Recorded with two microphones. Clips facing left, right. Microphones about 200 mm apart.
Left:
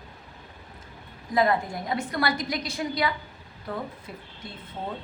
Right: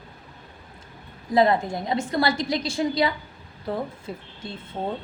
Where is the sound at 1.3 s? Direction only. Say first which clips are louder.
Right 4 dB; 25° right (ahead or behind).